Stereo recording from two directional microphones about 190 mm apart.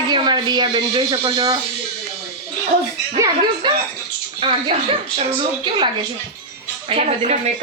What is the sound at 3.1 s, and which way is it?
A woman's voice, 20° right (ahead or behind).